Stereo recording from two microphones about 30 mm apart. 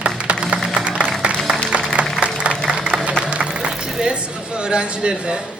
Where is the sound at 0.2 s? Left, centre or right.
Right.